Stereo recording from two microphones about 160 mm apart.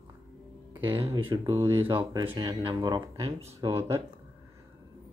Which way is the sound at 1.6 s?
15° right (ahead or behind).